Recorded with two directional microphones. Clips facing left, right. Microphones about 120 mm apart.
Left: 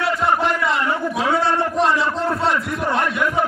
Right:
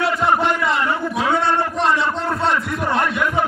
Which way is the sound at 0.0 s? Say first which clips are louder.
Right 1 dB; centre (ahead or behind).